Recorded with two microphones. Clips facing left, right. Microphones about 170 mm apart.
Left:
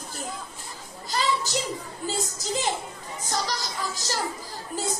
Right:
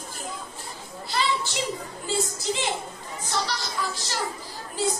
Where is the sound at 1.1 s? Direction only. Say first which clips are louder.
Left 1 dB; 40° left (ahead or behind).